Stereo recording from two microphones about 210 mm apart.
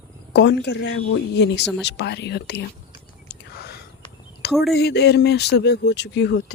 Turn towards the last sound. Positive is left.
turn(degrees=55)  # may be behind; listen again after turning